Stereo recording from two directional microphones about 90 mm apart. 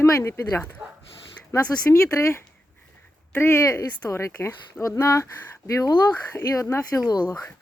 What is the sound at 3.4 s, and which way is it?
Speech, 25° left (ahead or behind).